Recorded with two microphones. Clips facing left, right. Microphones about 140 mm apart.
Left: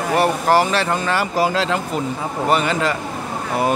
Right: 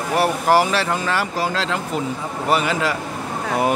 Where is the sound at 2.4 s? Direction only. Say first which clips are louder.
Left 1 dB; 5° right (ahead or behind).